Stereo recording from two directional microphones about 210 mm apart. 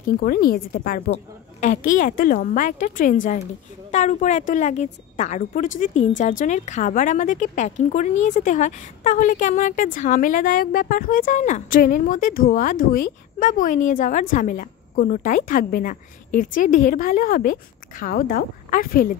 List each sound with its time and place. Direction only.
0.0 s a woman's voice: 45° left (ahead or behind)